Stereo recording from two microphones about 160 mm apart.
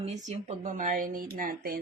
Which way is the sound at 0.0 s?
45° right (ahead or behind).